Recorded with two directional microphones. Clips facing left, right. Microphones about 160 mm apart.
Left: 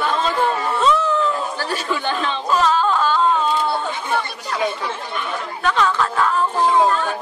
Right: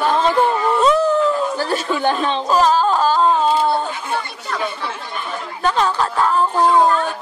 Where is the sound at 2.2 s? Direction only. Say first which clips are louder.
Right 3 dB; 35° right (ahead or behind).